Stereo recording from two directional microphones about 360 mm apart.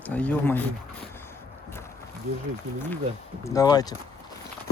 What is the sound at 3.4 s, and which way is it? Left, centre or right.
Speech, centre.